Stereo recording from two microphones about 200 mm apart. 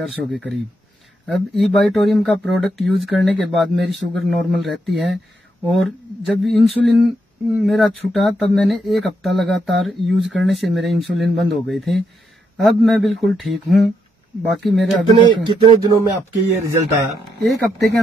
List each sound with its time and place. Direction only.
0.0 s speech: centre (ahead or behind)
15.0 s a sound: 20° right (ahead or behind)
16.3 s speech: 15° right (ahead or behind)